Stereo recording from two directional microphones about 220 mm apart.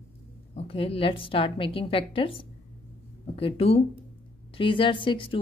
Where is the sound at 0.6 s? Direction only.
25° left (ahead or behind).